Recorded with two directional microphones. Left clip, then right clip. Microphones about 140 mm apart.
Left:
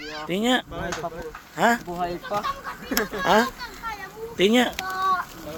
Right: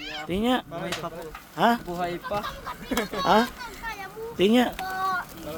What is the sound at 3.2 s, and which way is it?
Speech, 5° right (ahead or behind).